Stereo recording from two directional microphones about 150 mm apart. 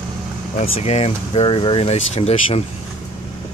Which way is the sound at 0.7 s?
45° left (ahead or behind).